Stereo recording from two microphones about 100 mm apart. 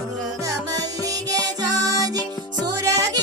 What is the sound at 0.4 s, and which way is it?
Music, 35° right (ahead or behind).